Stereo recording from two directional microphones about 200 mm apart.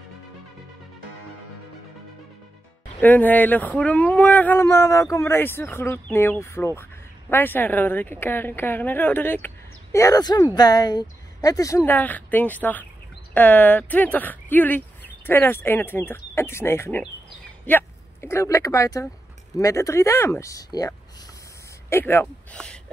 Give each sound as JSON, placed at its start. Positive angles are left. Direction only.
{"t": 3.0, "sound": "speech", "side_deg": 10}